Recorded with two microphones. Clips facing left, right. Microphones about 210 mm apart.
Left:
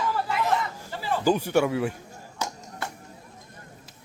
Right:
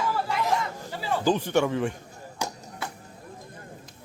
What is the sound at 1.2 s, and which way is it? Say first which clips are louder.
Speech: left 1 dB; 10° left (ahead or behind).